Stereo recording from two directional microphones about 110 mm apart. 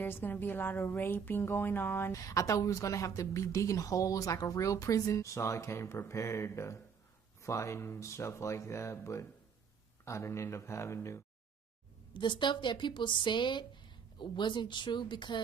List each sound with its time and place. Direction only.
0.0 s speech: 15° left (ahead or behind)
12.1 s speech: 45° left (ahead or behind)